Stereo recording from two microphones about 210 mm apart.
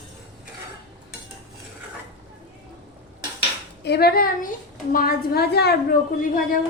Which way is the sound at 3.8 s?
50° left (ahead or behind).